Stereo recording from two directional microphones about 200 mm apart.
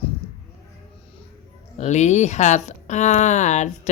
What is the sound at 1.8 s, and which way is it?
Speech, 35° left (ahead or behind).